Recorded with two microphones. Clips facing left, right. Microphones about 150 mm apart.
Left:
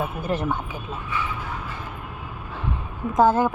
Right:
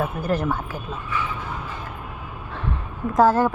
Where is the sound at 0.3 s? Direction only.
Centre (ahead or behind).